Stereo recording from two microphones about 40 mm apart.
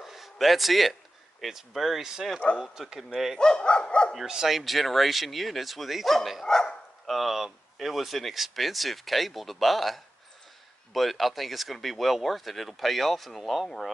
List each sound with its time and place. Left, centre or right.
0.0 s a sound: centre
1.4 s speech: centre
2.8 s speech: centre
3.3 s dog: left
4.3 s speech: centre
6.4 s speech: centre
7.1 s speech: centre